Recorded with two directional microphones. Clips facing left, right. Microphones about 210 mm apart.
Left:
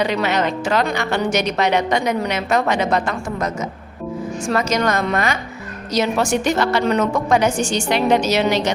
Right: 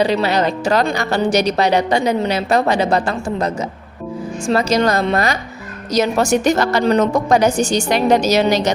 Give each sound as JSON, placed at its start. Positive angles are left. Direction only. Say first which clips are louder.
{"t": 0.0, "sound": "speech", "louder": "right 3 dB", "side_deg": -35}